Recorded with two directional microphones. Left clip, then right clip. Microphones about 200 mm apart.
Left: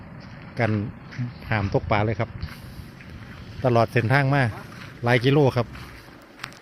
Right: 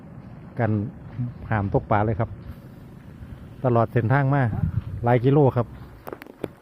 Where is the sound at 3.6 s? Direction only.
Centre (ahead or behind).